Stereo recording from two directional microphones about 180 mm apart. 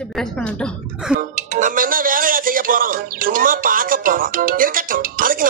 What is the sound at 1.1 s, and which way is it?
Speech, 45° right (ahead or behind).